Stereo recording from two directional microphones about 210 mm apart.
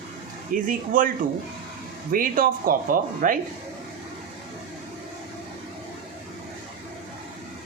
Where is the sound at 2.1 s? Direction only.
40° right (ahead or behind).